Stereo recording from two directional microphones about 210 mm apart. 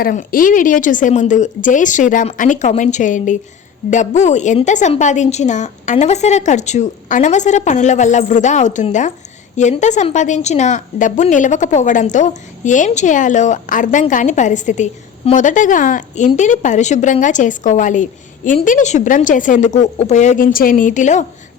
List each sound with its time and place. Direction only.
0.0 s a woman's voice: 40° left (ahead or behind)